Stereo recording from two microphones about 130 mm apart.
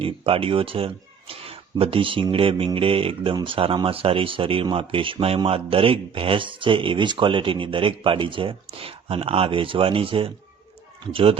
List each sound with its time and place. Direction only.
0.0 s speech: 45° right (ahead or behind)